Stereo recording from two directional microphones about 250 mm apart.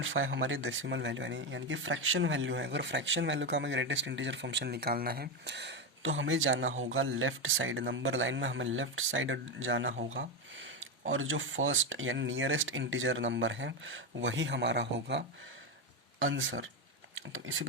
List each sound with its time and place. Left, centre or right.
0.0 s speech: right